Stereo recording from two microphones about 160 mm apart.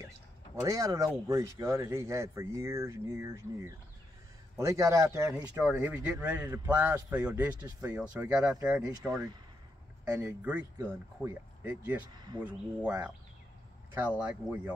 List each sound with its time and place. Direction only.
0.7 s speech: 20° right (ahead or behind)
10.1 s speech: 10° right (ahead or behind)
12.1 s speech: 25° right (ahead or behind)
12.4 s speech: 10° right (ahead or behind)
14.2 s speech: 10° right (ahead or behind)